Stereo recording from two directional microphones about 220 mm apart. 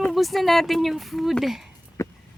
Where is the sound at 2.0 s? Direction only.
10° left (ahead or behind).